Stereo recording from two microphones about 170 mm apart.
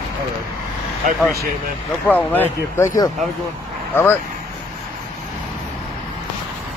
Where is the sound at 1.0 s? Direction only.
55° right (ahead or behind).